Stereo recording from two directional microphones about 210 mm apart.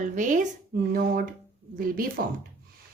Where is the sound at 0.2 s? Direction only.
40° right (ahead or behind).